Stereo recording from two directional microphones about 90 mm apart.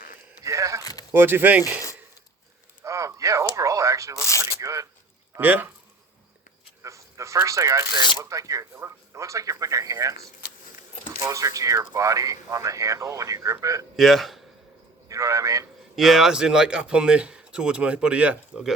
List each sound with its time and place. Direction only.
0.4 s a sound: 35° right (ahead or behind)
1.1 s speech: 25° right (ahead or behind)
2.8 s a sound: 35° right (ahead or behind)
4.2 s speech: 30° left (ahead or behind)
4.4 s zipper: 35° right (ahead or behind)
5.4 s speech: 20° right (ahead or behind)
6.8 s a sound: 35° right (ahead or behind)
8.2 s speech: 40° right (ahead or behind)
11.2 s speech: 35° right (ahead or behind)
13.9 s speech: centre (ahead or behind)
15.1 s speech: 40° right (ahead or behind)
16.0 s speech: 5° right (ahead or behind)